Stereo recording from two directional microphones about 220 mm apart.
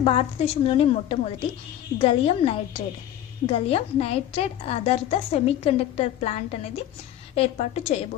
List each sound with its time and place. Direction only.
0.0 s a woman's voice: 25° left (ahead or behind)